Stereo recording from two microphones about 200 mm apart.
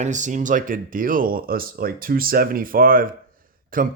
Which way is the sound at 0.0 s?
40° right (ahead or behind).